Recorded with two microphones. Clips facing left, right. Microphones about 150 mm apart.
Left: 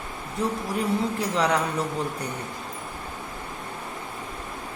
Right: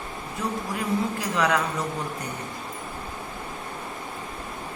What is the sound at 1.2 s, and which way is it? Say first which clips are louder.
Speech: left 1 dB; 30° left (ahead or behind).